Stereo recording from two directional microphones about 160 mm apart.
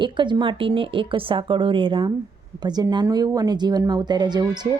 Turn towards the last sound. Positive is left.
turn(degrees=-25)  # may be behind; listen again after turning